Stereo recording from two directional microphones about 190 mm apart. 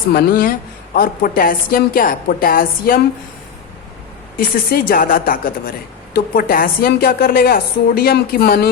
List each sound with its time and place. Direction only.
0.1 s a woman's voice: 50° left (ahead or behind)
4.4 s a woman's voice: 50° left (ahead or behind)